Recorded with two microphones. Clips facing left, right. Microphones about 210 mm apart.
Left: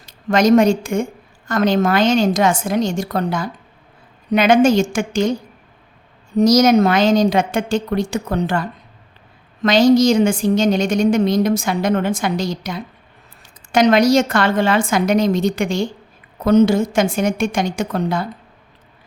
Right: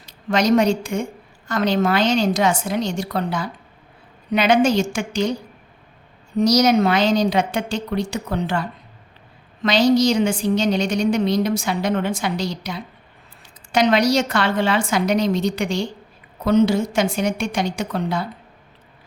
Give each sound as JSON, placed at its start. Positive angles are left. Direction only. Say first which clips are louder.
{"t": 0.0, "sound": "a woman's voice", "louder": "left 4 dB", "side_deg": 50}
{"t": 6.3, "sound": "a woman's voice", "louder": "left 4 dB", "side_deg": 50}
{"t": 9.6, "sound": "a woman's voice", "louder": "left 4 dB", "side_deg": 45}